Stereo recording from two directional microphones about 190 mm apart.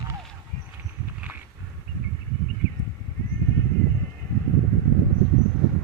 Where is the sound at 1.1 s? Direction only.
10° right (ahead or behind).